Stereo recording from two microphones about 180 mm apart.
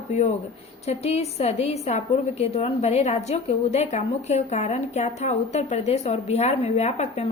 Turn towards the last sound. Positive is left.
turn(degrees=40)  # may be behind; listen again after turning